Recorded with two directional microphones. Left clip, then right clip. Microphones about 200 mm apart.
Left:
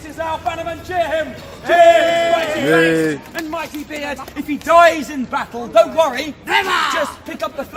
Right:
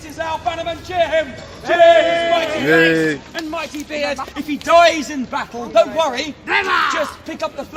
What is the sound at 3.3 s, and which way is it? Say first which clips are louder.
A man's voice: even; 25° right (ahead or behind).